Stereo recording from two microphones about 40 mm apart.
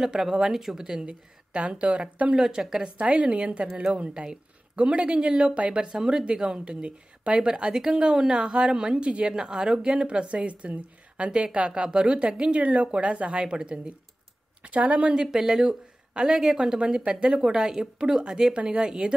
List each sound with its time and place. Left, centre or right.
0.0 s speech: centre
1.5 s a woman's voice: right
2.3 s speech: centre
3.0 s a woman's voice: right
4.1 s speech: right
5.9 s speech: centre
9.3 s speech: centre
10.0 s a woman's voice: right
14.6 s speech: right
15.1 s speech: centre
16.8 s speech: right
17.4 s speech: centre